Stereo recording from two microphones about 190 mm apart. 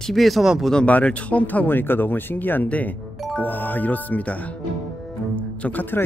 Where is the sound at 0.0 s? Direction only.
Centre (ahead or behind).